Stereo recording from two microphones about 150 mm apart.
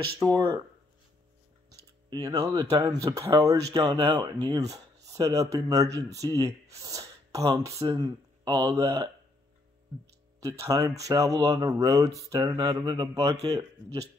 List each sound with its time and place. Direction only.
0.2 s speech: 25° right (ahead or behind)
2.0 s speech: 25° right (ahead or behind)
10.4 s speech: 20° right (ahead or behind)